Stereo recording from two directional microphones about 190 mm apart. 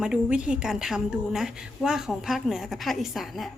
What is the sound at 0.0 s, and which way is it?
A woman's voice, 5° right (ahead or behind).